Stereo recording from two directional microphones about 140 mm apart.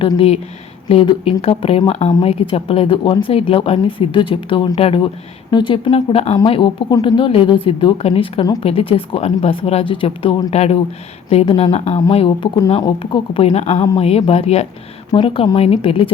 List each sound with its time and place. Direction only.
0.9 s speech: 45° left (ahead or behind)
13.5 s speech: 50° left (ahead or behind)